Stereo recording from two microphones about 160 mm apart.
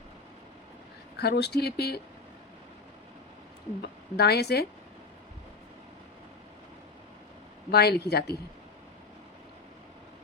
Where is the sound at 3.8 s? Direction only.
90° left.